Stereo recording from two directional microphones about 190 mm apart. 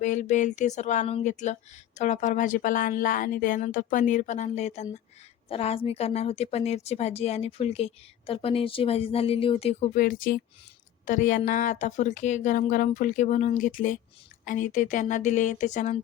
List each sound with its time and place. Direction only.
0.0 s a woman's voice: 40° left (ahead or behind)